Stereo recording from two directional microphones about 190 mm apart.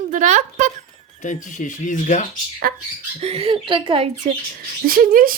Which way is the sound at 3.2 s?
30° right (ahead or behind).